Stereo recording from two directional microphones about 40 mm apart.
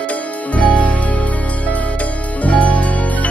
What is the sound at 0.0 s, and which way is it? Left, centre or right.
Music, left.